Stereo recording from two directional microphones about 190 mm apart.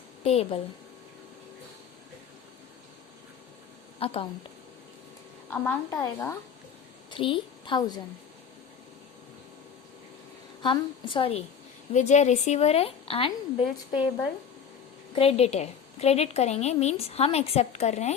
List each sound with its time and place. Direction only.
0.3 s a woman's voice: 30° left (ahead or behind)
4.0 s a woman's voice: 30° left (ahead or behind)
5.5 s a woman's voice: 10° left (ahead or behind)
7.1 s a woman's voice: 25° left (ahead or behind)
10.6 s a woman's voice: 25° left (ahead or behind)
15.1 s a woman's voice: 30° left (ahead or behind)